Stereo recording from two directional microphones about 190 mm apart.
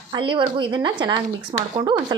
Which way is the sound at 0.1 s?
25° right (ahead or behind).